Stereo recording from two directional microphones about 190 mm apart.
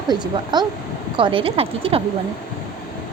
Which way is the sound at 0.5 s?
25° right (ahead or behind).